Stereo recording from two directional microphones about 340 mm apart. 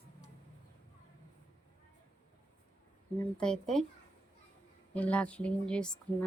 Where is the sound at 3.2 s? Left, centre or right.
Centre.